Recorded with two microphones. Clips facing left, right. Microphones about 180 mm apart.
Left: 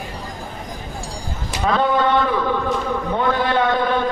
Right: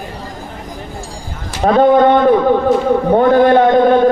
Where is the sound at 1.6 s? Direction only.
45° right (ahead or behind).